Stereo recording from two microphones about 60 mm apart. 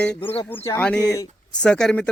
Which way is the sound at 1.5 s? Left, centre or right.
Centre.